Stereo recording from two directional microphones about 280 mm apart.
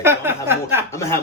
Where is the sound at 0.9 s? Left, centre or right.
Centre.